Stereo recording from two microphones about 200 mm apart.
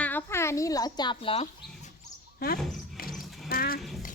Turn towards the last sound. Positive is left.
turn(degrees=0)  # may be behind; listen again after turning